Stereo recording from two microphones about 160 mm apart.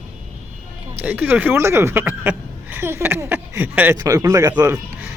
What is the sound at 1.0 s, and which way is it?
Speech, 10° right (ahead or behind).